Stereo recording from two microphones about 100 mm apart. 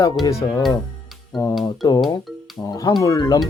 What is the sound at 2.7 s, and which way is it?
Speech, 40° left (ahead or behind).